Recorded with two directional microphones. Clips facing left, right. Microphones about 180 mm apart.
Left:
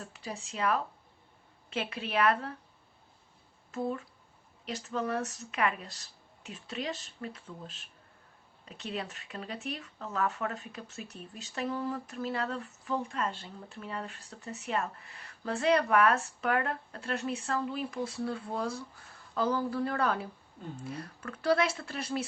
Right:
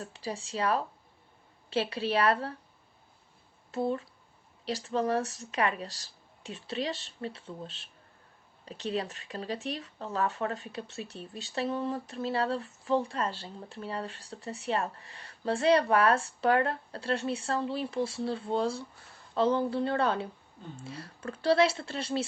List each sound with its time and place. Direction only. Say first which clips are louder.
0.0 s speech: right 4 dB; 30° right (ahead or behind)
3.7 s speech: right 3 dB; 30° right (ahead or behind)